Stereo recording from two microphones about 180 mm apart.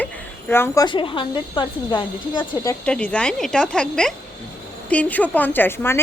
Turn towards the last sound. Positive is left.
turn(degrees=15)  # may be behind; listen again after turning